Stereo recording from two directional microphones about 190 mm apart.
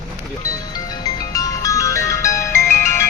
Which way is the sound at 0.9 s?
20° left (ahead or behind).